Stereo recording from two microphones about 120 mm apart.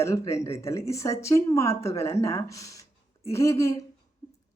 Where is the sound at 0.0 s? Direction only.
25° left (ahead or behind).